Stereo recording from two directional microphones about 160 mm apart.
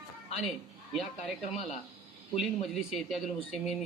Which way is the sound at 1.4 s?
40° left (ahead or behind).